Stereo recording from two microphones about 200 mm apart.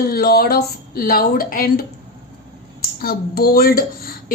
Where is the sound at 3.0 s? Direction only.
50° left (ahead or behind).